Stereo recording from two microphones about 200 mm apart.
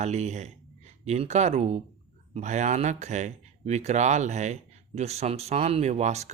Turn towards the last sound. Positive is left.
turn(degrees=-35)  # may be behind; listen again after turning